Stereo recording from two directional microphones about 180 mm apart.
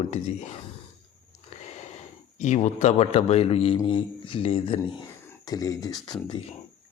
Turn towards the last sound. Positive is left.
turn(degrees=20)  # may be behind; listen again after turning